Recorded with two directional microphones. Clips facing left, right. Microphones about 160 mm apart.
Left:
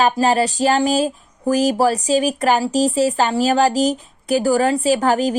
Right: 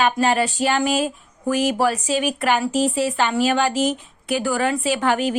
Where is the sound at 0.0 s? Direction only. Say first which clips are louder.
Left 3 dB; 35° left (ahead or behind).